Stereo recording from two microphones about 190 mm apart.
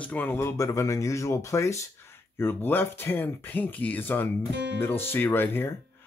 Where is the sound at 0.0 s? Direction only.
10° left (ahead or behind).